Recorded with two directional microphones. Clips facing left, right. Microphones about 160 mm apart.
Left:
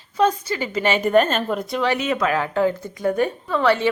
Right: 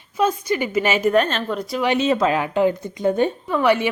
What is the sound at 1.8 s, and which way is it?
Speech, 25° right (ahead or behind).